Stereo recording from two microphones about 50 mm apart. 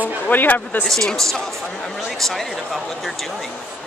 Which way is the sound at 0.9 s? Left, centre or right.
Centre.